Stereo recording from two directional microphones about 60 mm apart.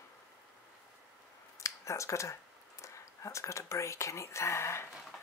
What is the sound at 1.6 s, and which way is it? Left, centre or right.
Speech, left.